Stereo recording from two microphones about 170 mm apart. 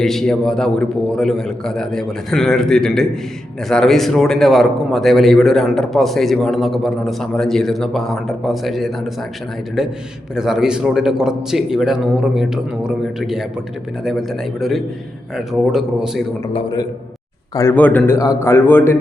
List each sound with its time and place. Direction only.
0.0 s a man's voice: centre (ahead or behind)
16.5 s a man's voice: 35° left (ahead or behind)
17.5 s a man's voice: 15° left (ahead or behind)